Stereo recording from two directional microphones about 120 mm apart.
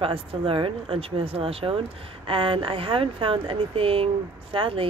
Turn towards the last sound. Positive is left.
turn(degrees=-45)  # may be behind; listen again after turning